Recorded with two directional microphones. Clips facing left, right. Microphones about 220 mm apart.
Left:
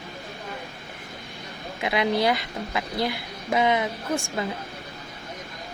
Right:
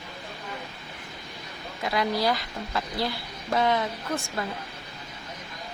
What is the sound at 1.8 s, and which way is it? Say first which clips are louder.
A woman's voice: left 3 dB; 20° left (ahead or behind).